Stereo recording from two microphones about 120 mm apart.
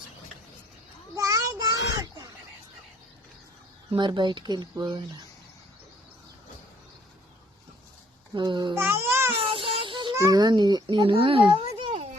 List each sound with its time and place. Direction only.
1.1 s a sound: 30° right (ahead or behind)
3.9 s speech: 40° right (ahead or behind)
8.4 s speech: 40° right (ahead or behind)
8.7 s a child's voice: 20° right (ahead or behind)
9.3 s child singing: 45° right (ahead or behind)
10.2 s a child's voice: 30° right (ahead or behind)